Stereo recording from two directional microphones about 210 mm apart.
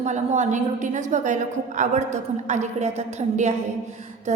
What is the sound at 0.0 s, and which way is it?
A woman's voice, 35° right (ahead or behind).